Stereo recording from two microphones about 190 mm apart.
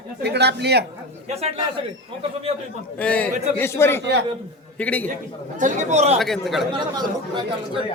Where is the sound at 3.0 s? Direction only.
5° left (ahead or behind).